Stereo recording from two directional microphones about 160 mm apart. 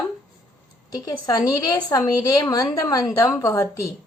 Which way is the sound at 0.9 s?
25° left (ahead or behind).